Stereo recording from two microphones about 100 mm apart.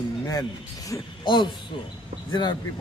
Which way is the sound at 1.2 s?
50° left (ahead or behind).